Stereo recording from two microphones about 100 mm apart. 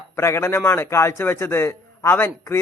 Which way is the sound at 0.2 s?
25° left (ahead or behind).